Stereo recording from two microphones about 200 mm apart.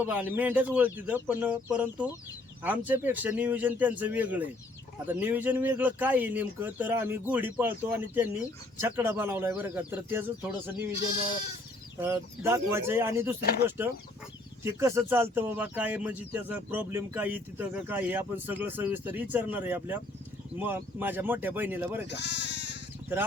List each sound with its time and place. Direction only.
0.0 s speech: 10° right (ahead or behind)
11.9 s speech: 10° right (ahead or behind)
13.4 s speech: 50° left (ahead or behind)
13.7 s speech: 10° right (ahead or behind)
22.0 s speech: 60° left (ahead or behind)